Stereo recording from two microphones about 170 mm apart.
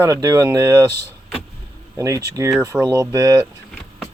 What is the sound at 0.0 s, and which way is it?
Speech, 15° right (ahead or behind).